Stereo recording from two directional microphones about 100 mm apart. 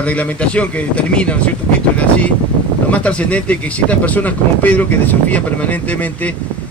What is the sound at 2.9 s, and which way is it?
Speech, 15° left (ahead or behind).